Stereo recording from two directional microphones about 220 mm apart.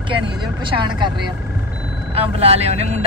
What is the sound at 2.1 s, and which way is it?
Speech, 30° right (ahead or behind).